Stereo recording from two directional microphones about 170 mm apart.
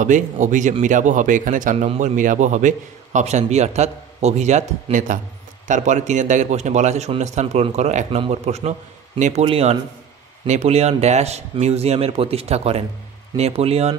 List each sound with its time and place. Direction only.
0.0 s a man's voice: 45° right (ahead or behind)